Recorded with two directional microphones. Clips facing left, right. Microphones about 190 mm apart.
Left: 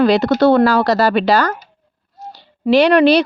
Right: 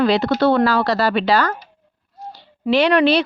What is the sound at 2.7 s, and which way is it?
Speech, 40° left (ahead or behind).